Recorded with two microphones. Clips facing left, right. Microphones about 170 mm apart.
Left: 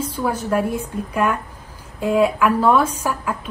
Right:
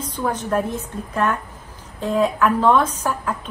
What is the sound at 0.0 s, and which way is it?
Speech, 10° left (ahead or behind).